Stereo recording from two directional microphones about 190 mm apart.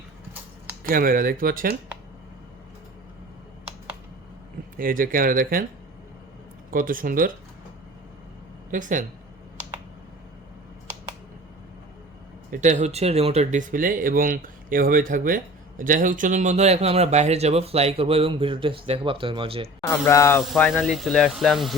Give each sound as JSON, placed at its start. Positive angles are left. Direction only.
{"t": 0.9, "sound": "speech", "side_deg": -50}
{"t": 4.8, "sound": "speech", "side_deg": -45}
{"t": 6.7, "sound": "speech", "side_deg": -45}
{"t": 8.7, "sound": "speech", "side_deg": -45}
{"t": 12.5, "sound": "speech", "side_deg": -40}
{"t": 19.9, "sound": "speech", "side_deg": 15}
{"t": 20.4, "sound": "speech", "side_deg": 0}